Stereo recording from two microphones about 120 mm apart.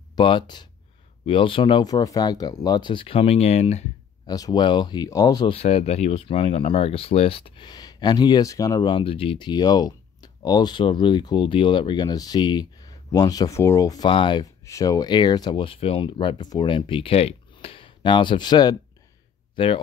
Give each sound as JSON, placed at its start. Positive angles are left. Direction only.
{"t": 0.1, "sound": "speech", "side_deg": 40}
{"t": 1.9, "sound": "speech", "side_deg": 30}
{"t": 4.3, "sound": "speech", "side_deg": 35}
{"t": 5.5, "sound": "speech", "side_deg": 55}
{"t": 8.9, "sound": "speech", "side_deg": 50}
{"t": 14.0, "sound": "speech", "side_deg": 45}
{"t": 14.4, "sound": "speech", "side_deg": 25}
{"t": 19.5, "sound": "speech", "side_deg": 50}